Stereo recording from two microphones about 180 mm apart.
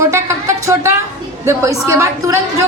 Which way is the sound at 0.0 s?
15° right (ahead or behind).